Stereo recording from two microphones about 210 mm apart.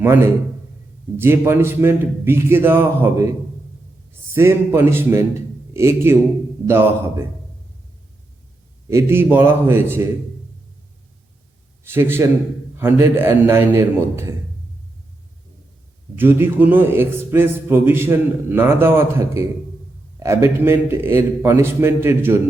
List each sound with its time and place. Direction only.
0.0 s a man's voice: 10° right (ahead or behind)
4.3 s a man's voice: 10° right (ahead or behind)
8.9 s a man's voice: 10° right (ahead or behind)
11.8 s a man's voice: 10° right (ahead or behind)
16.1 s a man's voice: 10° right (ahead or behind)